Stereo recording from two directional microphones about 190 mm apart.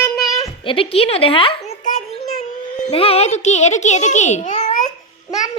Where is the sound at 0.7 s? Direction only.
30° left (ahead or behind).